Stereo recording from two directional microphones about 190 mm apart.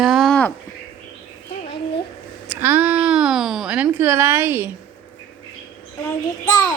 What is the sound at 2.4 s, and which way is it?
Speech, 10° right (ahead or behind).